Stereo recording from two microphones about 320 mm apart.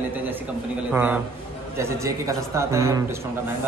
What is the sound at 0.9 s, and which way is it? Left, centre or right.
A man's voice, centre.